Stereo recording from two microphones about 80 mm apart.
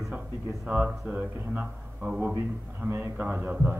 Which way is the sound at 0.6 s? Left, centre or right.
Centre.